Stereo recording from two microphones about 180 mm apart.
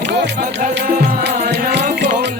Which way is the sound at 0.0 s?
70° right (ahead or behind).